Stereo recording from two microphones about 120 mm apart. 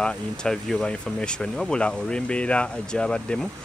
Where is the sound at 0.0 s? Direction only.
5° left (ahead or behind).